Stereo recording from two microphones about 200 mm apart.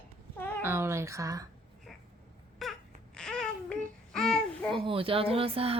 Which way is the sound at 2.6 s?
Centre (ahead or behind).